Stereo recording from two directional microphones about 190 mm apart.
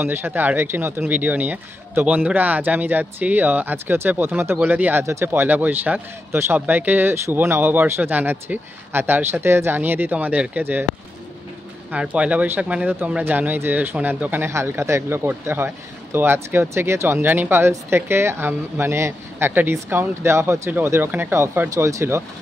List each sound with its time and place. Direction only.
0.0 s speech: 10° right (ahead or behind)
11.9 s speech: 5° right (ahead or behind)